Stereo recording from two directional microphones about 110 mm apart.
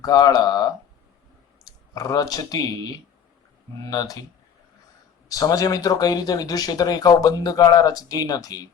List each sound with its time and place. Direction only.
0.0 s speech: 35° left (ahead or behind)
3.8 s speech: 35° left (ahead or behind)
5.3 s speech: 35° left (ahead or behind)